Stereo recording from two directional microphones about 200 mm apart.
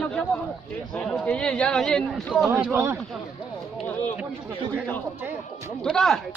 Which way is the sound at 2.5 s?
15° right (ahead or behind).